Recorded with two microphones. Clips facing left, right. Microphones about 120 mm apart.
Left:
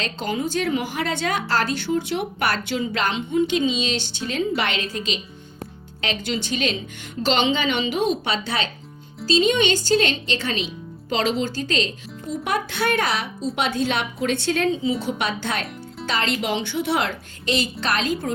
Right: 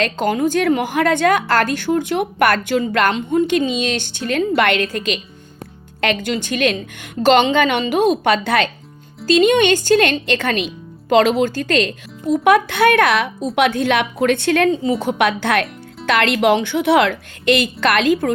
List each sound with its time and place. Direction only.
0.0 s a woman's voice: 55° right (ahead or behind)